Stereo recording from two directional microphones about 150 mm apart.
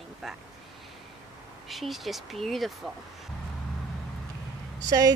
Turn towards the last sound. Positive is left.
turn(degrees=-25)  # may be behind; listen again after turning